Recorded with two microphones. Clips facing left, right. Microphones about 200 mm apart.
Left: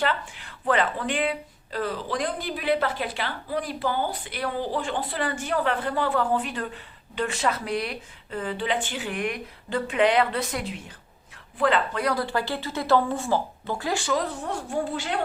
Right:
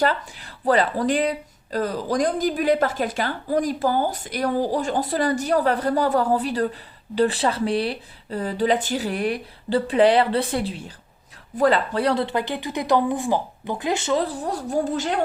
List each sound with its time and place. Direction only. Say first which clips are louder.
0.0 s speech: right 5 dB; 40° right (ahead or behind)